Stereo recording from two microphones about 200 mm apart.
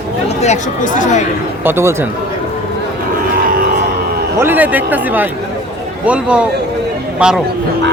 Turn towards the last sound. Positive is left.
turn(degrees=-5)  # may be behind; listen again after turning